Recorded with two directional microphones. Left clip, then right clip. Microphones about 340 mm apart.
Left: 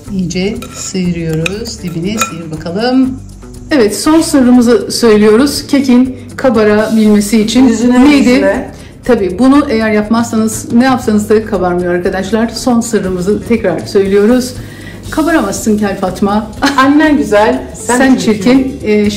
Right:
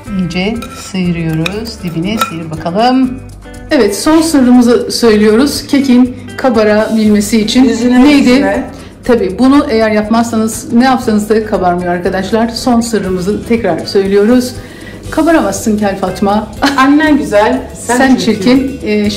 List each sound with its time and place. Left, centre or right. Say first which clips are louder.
0.3 s a woman's voice: even; centre